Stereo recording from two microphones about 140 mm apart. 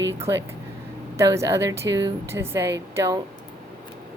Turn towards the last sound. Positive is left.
turn(degrees=-25)  # may be behind; listen again after turning